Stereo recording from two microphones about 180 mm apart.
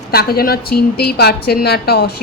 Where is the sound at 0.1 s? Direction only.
60° left (ahead or behind).